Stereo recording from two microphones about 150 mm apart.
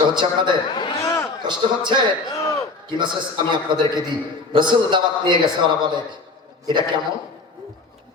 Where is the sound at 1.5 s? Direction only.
30° right (ahead or behind).